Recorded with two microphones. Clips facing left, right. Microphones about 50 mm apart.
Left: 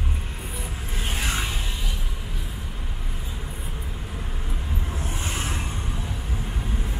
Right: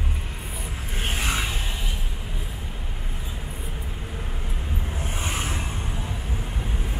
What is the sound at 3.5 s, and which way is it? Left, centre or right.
Vehicle, centre.